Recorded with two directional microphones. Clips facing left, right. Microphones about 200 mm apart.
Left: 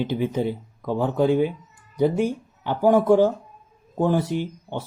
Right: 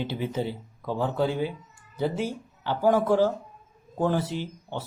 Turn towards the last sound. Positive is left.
turn(degrees=15)  # may be behind; listen again after turning